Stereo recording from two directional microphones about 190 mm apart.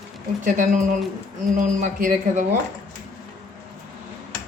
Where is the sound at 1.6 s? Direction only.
40° right (ahead or behind).